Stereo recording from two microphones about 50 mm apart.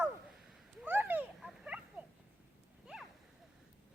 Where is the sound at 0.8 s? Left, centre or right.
Right.